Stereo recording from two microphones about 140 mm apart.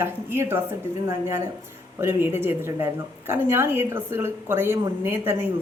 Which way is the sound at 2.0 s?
15° right (ahead or behind).